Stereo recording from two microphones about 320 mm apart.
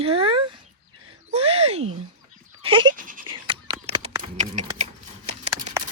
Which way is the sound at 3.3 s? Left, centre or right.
Centre.